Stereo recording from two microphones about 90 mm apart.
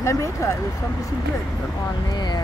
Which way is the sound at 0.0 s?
35° left (ahead or behind).